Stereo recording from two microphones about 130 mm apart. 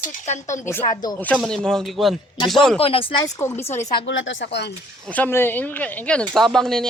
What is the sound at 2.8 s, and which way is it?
Speech, 45° left (ahead or behind).